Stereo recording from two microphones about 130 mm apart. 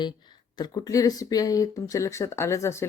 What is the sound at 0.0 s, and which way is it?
Speech, 35° left (ahead or behind).